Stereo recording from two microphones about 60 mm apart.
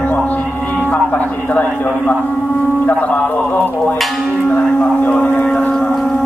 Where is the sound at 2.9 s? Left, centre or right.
Left.